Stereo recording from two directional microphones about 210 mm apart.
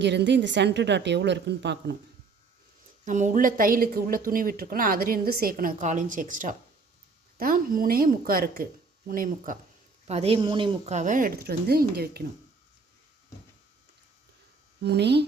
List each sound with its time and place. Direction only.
0.0 s a woman's voice: 55° right (ahead or behind)
3.0 s speech: 35° right (ahead or behind)
10.1 s speech: 30° right (ahead or behind); by 12.2 s 45° right (ahead or behind)
14.8 s speech: 55° right (ahead or behind)